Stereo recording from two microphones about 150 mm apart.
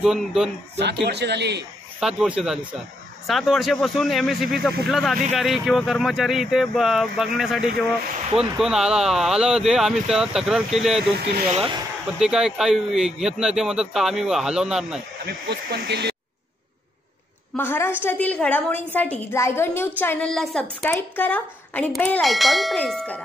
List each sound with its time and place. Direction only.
0.0 s speech: 5° right (ahead or behind)
1.0 s speech: 90° right
2.0 s speech: 5° right (ahead or behind)
12.2 s speech: 5° right (ahead or behind)
15.2 s speech: 90° right
17.6 s a woman's voice: 15° left (ahead or behind)
21.9 s a woman's voice: centre (ahead or behind)